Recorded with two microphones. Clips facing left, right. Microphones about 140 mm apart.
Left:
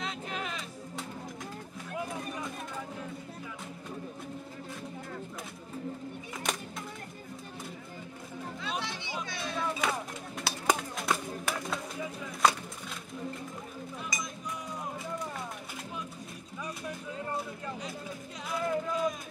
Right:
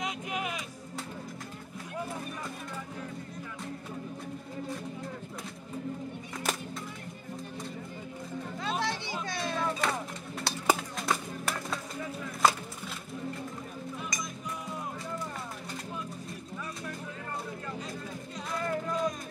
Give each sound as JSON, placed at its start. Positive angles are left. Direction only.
{"t": 0.0, "sound": "music", "side_deg": -10}
{"t": 8.5, "sound": "music", "side_deg": -45}
{"t": 9.8, "sound": "run", "side_deg": 0}
{"t": 10.4, "sound": "a sound", "side_deg": 0}
{"t": 12.4, "sound": "music", "side_deg": 0}
{"t": 14.1, "sound": "music", "side_deg": 0}
{"t": 18.5, "sound": "a sound", "side_deg": 5}